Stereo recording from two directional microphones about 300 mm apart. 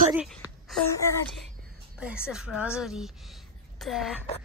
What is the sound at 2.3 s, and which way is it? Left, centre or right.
A woman's voice, centre.